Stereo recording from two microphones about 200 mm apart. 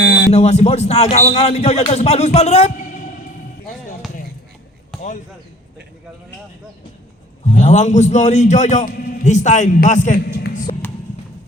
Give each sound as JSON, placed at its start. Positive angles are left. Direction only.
{"t": 0.0, "sound": "a sound", "side_deg": 60}
{"t": 0.3, "sound": "a man's voice", "side_deg": 30}
{"t": 7.5, "sound": "a man's voice", "side_deg": 35}